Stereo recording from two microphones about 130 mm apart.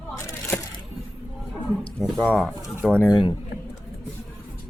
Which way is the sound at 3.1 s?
30° left (ahead or behind).